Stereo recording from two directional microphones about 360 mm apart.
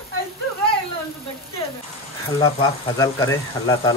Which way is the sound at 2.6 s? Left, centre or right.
Centre.